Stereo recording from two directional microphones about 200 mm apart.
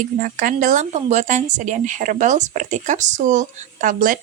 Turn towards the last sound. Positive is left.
turn(degrees=-40)  # may be behind; listen again after turning